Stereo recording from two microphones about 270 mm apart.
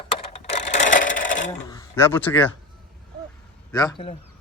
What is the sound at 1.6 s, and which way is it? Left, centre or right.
Speech, centre.